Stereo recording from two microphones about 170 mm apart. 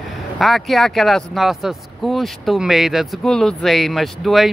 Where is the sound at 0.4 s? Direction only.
Centre (ahead or behind).